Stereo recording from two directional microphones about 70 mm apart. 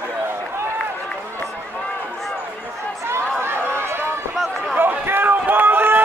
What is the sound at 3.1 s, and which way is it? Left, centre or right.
Run, right.